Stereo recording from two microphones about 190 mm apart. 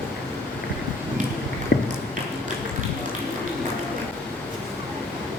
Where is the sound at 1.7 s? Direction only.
60° left (ahead or behind).